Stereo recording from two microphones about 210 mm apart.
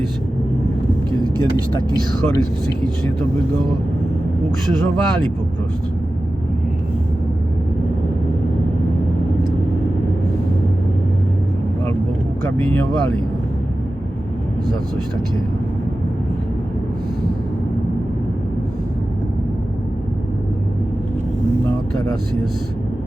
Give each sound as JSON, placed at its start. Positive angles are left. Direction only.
{"t": 1.5, "sound": "speech", "side_deg": 20}
{"t": 4.6, "sound": "speech", "side_deg": 5}